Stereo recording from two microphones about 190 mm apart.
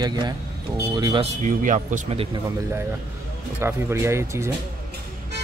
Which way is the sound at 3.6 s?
15° right (ahead or behind).